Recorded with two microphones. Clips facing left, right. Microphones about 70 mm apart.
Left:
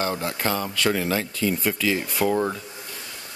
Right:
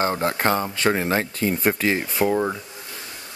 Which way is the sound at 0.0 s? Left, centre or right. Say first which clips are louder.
Right 4 dB; right.